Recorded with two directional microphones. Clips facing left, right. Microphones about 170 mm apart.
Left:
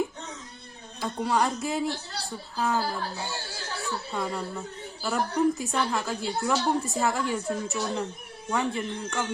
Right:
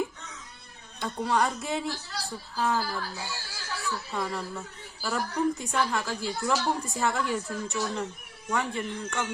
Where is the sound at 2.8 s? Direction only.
30° left (ahead or behind).